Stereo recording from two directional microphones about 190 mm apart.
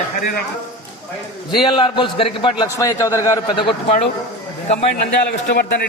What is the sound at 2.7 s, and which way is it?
Speech, 15° left (ahead or behind).